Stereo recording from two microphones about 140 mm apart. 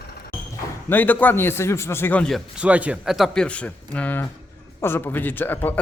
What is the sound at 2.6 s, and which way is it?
A man's voice, 10° right (ahead or behind).